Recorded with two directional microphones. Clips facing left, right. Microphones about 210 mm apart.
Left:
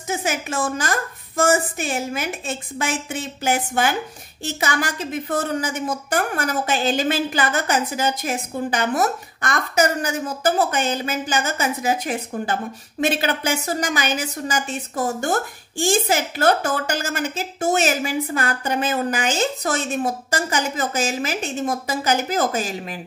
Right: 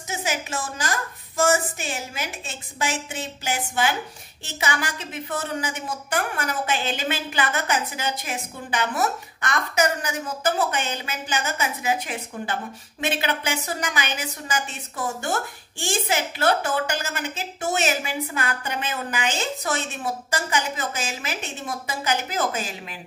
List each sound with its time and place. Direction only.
0.1 s a woman's voice: 55° left (ahead or behind)